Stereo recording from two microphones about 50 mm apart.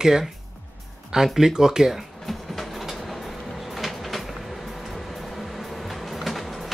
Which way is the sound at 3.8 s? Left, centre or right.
Centre.